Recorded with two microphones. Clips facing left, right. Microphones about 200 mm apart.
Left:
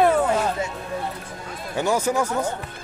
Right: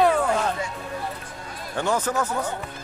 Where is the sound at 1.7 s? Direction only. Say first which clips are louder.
Left 3 dB; 10° left (ahead or behind).